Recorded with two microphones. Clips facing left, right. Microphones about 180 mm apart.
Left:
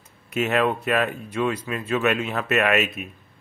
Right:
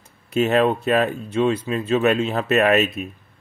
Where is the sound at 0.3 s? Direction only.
30° right (ahead or behind).